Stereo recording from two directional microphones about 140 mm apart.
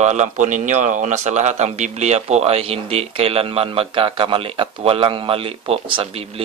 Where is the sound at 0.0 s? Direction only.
55° right (ahead or behind).